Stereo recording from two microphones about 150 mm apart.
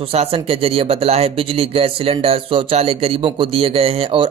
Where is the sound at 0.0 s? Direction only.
40° right (ahead or behind).